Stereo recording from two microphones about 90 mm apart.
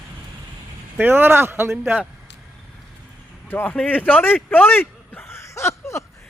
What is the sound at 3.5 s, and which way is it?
Speech, 20° left (ahead or behind).